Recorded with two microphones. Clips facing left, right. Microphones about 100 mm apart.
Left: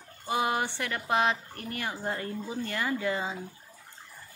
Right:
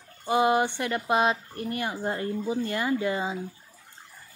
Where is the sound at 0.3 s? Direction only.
25° right (ahead or behind).